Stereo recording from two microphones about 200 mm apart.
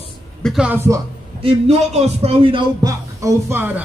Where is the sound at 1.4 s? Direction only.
30° right (ahead or behind).